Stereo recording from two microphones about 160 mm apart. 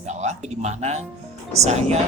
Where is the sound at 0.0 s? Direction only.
45° right (ahead or behind).